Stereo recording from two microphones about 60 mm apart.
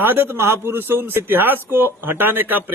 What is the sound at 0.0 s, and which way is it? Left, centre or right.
Speech, right.